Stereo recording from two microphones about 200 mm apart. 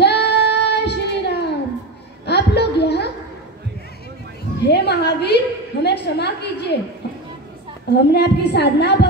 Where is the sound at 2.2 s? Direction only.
55° left (ahead or behind).